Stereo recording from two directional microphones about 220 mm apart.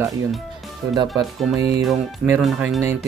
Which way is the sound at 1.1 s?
Centre (ahead or behind).